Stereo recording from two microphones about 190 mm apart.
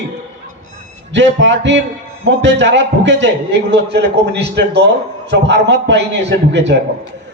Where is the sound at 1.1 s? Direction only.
70° right (ahead or behind).